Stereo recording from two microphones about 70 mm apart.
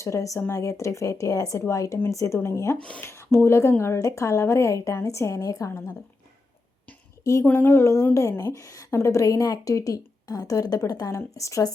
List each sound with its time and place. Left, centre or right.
0.0 s a woman's voice: left
7.4 s a woman's voice: left